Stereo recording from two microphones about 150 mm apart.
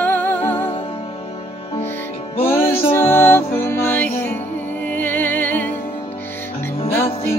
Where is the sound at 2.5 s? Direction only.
15° left (ahead or behind).